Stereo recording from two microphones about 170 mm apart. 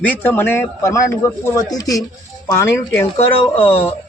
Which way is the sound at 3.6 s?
35° left (ahead or behind).